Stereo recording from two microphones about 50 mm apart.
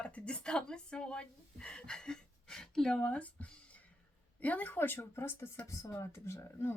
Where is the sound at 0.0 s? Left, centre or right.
Left.